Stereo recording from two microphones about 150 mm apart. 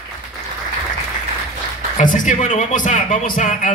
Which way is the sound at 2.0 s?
60° left (ahead or behind).